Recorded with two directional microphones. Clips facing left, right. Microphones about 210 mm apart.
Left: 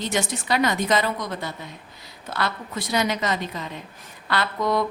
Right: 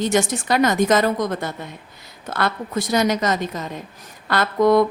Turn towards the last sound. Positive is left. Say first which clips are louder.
# right 8 dB
turn(degrees=-50)  # may be behind; listen again after turning